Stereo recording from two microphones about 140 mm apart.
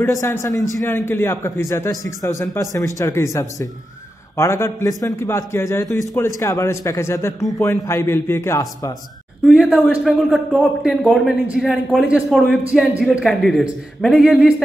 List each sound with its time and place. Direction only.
0.0 s a man's voice: 20° left (ahead or behind)
9.4 s a man's voice: 5° right (ahead or behind)